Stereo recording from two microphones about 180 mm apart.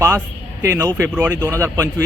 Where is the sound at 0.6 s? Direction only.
20° right (ahead or behind).